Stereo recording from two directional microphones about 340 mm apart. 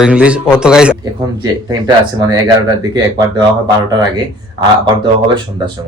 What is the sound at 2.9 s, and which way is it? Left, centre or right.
Speech, centre.